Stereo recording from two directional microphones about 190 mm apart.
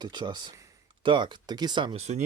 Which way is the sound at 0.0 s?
25° right (ahead or behind).